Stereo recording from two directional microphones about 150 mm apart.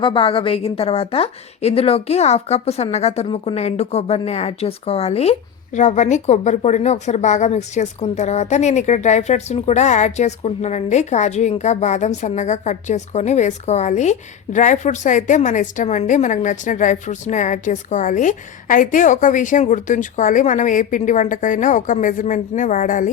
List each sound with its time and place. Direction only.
0.0 s a woman's voice: 35° left (ahead or behind); by 23.1 s 60° left (ahead or behind)